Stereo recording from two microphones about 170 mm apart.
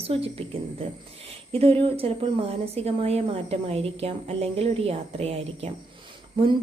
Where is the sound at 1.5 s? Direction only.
35° right (ahead or behind).